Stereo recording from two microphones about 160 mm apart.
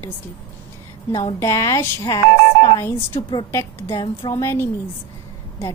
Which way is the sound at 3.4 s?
20° left (ahead or behind).